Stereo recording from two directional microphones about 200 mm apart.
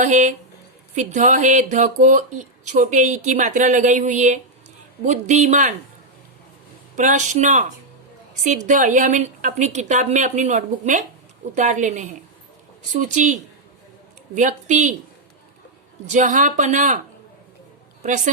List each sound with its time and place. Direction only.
0.0 s speech: 40° right (ahead or behind)
6.9 s speech: 40° right (ahead or behind)
16.0 s speech: 40° right (ahead or behind)